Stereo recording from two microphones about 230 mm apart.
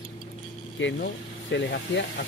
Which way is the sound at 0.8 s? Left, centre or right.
Left.